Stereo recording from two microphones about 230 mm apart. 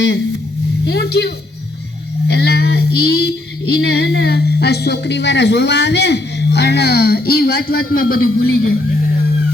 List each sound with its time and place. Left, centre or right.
0.9 s child singing: left